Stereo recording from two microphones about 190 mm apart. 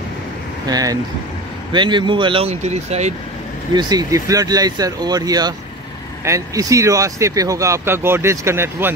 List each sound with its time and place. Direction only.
0.7 s speech: 20° right (ahead or behind); by 3.2 s 35° right (ahead or behind)
3.7 s speech: 20° right (ahead or behind)